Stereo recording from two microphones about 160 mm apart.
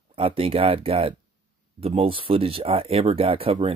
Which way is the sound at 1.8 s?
35° right (ahead or behind).